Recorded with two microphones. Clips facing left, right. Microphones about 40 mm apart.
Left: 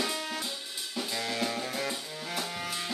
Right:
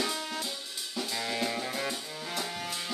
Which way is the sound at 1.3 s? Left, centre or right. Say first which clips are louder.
Right 1 dB; centre.